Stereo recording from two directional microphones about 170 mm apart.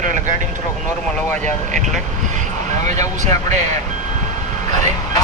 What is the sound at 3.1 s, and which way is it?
Speech, 45° right (ahead or behind).